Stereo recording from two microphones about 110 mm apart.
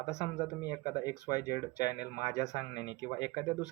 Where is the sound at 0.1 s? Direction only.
35° left (ahead or behind).